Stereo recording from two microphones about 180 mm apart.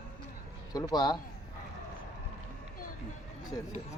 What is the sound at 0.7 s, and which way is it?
Speech, 25° left (ahead or behind).